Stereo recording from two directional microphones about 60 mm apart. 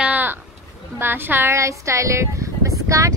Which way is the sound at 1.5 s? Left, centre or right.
Right.